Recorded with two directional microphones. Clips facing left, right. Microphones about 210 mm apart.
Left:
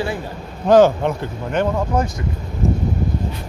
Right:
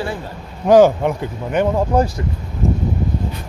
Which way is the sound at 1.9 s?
35° right (ahead or behind).